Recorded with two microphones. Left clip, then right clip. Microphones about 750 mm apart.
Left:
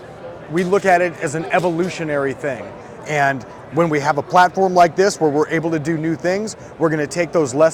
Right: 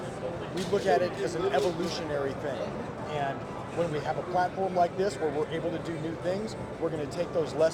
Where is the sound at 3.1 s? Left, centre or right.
Left.